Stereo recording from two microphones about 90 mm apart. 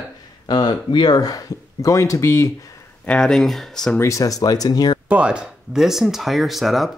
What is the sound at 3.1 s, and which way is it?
Speech, 10° left (ahead or behind).